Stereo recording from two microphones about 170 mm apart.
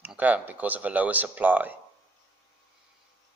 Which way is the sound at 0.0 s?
10° right (ahead or behind).